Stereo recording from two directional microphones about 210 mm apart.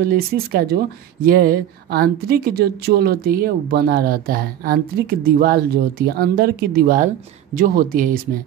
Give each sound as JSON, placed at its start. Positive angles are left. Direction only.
{"t": 0.0, "sound": "speech", "side_deg": -45}